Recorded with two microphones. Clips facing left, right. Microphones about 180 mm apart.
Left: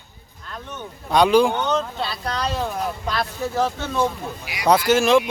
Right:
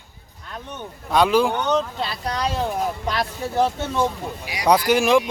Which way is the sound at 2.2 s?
15° right (ahead or behind).